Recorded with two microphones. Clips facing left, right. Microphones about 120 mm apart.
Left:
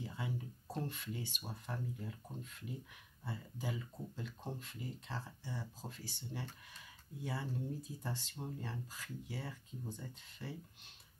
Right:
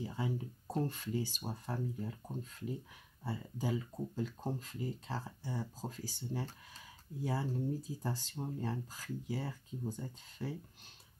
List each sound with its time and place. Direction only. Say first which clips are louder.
0.0 s speech: right 5 dB; 40° right (ahead or behind)
3.3 s speech: right 6 dB; 40° right (ahead or behind)